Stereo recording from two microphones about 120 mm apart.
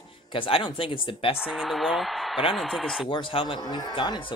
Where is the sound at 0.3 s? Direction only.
50° left (ahead or behind).